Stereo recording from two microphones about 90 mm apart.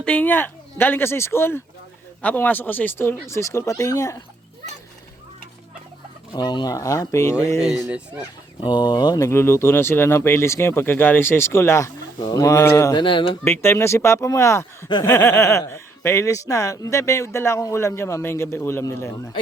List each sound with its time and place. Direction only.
0.0 s speech: 15° left (ahead or behind); by 4.2 s 35° left (ahead or behind)
6.3 s speech: 50° left (ahead or behind)
6.7 s speech: 40° left (ahead or behind)
7.9 s speech: 20° right (ahead or behind)
8.6 s speech: 60° left (ahead or behind)
9.1 s speech: 30° left (ahead or behind)
12.2 s speech: 40° left (ahead or behind)
12.9 s speech: 65° left (ahead or behind)
13.4 s speech: 30° left (ahead or behind)